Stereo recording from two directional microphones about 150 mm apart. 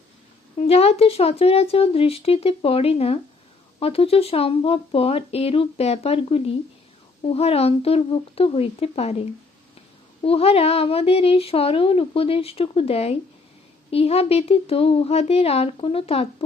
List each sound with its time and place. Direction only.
0.5 s speech: 45° left (ahead or behind)
10.2 s speech: 40° left (ahead or behind)